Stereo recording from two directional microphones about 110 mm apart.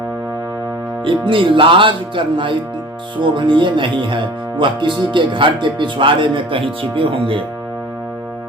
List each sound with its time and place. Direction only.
1.0 s speech: 50° right (ahead or behind)